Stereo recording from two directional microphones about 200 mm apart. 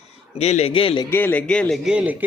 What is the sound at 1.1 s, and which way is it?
Speech, 10° left (ahead or behind).